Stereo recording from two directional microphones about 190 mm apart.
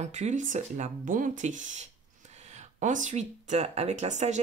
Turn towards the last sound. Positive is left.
turn(degrees=-40)  # may be behind; listen again after turning